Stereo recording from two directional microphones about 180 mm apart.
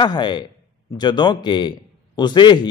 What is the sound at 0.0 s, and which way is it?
A man's voice, 25° left (ahead or behind).